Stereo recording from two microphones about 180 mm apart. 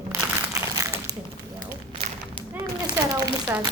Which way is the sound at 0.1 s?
15° right (ahead or behind).